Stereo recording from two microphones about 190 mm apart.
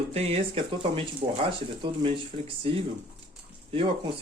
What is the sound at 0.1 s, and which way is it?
Speech, 35° right (ahead or behind).